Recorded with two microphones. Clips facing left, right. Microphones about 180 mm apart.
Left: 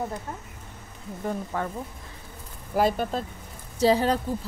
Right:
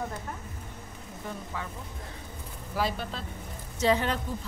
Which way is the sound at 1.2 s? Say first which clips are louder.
Left 8 dB; 50° left (ahead or behind).